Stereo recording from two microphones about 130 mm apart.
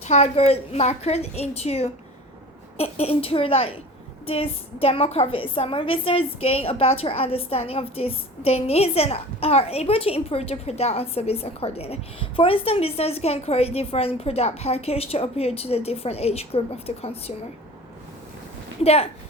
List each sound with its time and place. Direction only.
0.0 s a woman's voice: 55° left (ahead or behind)
18.8 s a woman's voice: 50° left (ahead or behind)